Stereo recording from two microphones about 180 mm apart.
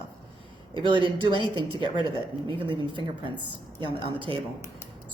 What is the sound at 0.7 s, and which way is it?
Speech, 25° right (ahead or behind).